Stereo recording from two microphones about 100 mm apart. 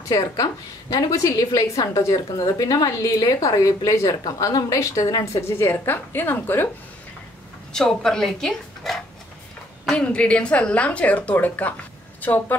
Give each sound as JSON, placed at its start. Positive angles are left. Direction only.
{"t": 0.1, "sound": "a woman's voice", "side_deg": 35}
{"t": 7.7, "sound": "speech", "side_deg": 5}